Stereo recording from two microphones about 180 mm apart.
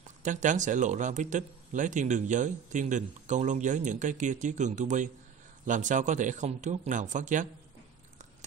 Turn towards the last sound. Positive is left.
turn(degrees=-45)  # may be behind; listen again after turning